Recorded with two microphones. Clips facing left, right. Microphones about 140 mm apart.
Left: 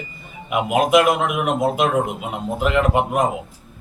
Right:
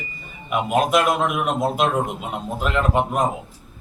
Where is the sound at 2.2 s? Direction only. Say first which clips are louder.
Left 3 dB; 15° left (ahead or behind).